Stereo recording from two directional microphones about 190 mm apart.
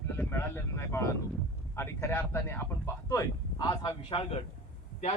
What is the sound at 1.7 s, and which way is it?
A man's voice, 15° left (ahead or behind).